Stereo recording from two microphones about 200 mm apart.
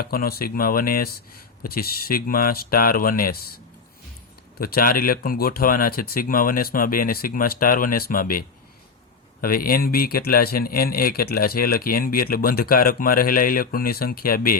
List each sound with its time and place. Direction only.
0.0 s a man's voice: 45° left (ahead or behind)